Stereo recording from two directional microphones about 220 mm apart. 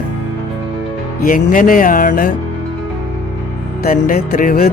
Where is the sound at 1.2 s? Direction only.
35° left (ahead or behind).